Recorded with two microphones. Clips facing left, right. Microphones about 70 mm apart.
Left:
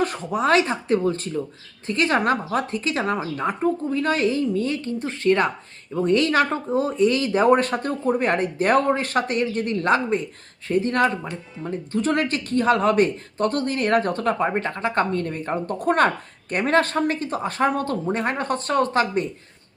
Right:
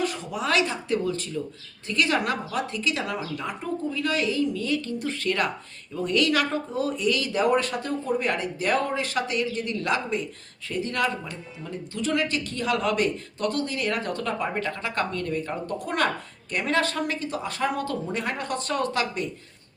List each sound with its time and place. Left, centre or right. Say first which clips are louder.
0.0 s speech: left 6 dB; left